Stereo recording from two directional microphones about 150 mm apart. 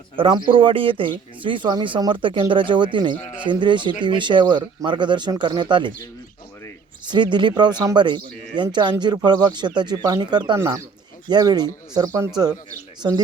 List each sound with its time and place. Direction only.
0.2 s speech: 35° right (ahead or behind)
7.0 s speech: 30° right (ahead or behind)